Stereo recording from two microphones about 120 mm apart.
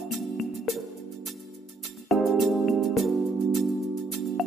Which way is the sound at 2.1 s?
Centre (ahead or behind).